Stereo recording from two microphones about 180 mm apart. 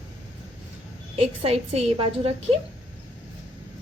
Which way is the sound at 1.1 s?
35° right (ahead or behind).